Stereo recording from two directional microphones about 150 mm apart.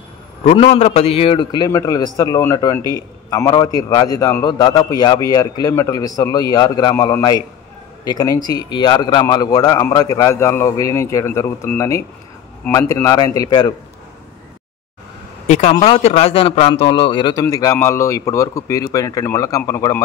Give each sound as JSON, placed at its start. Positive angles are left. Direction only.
{"t": 0.4, "sound": "a man's voice", "side_deg": 45}
{"t": 15.4, "sound": "speech", "side_deg": 50}
{"t": 15.7, "sound": "a man's voice", "side_deg": 35}